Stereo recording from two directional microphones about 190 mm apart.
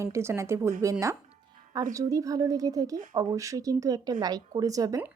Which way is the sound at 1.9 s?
15° right (ahead or behind).